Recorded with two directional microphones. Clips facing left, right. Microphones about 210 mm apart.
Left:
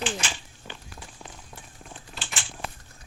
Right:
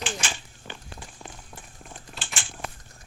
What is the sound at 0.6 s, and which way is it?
Run, centre (ahead or behind).